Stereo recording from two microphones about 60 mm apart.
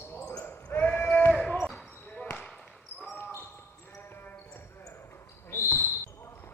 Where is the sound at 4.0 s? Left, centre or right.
Left.